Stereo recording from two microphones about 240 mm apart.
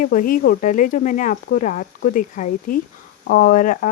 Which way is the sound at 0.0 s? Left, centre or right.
Left.